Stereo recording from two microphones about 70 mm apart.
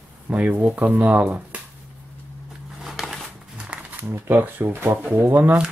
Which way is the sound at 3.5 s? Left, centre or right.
Centre.